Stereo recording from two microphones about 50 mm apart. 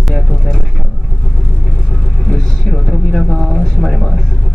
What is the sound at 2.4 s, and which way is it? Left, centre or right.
Vehicle, centre.